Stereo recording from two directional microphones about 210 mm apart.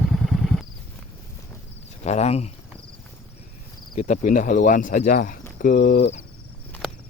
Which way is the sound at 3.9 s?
35° left (ahead or behind).